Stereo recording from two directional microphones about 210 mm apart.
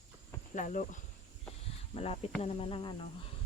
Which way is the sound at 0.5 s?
35° left (ahead or behind).